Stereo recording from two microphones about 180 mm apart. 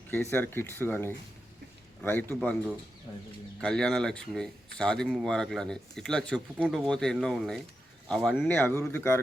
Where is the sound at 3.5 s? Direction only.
5° left (ahead or behind).